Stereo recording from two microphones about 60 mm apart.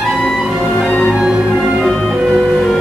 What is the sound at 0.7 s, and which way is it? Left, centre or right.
Music, centre.